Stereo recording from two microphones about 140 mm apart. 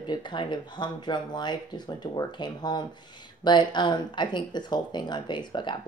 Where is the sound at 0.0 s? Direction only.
35° left (ahead or behind).